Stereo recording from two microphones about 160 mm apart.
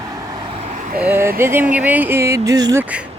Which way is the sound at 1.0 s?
15° right (ahead or behind).